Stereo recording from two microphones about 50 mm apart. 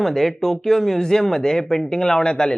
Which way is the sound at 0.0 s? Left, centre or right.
Centre.